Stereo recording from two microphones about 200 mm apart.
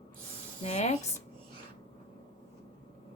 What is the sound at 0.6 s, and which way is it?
Speech, 35° left (ahead or behind).